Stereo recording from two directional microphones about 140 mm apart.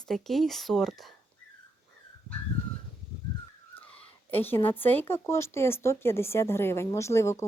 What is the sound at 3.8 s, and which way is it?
Speech, 15° left (ahead or behind).